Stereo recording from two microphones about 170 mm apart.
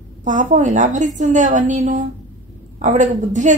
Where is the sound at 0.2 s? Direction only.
45° right (ahead or behind).